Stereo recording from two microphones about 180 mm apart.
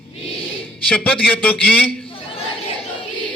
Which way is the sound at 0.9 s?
10° left (ahead or behind).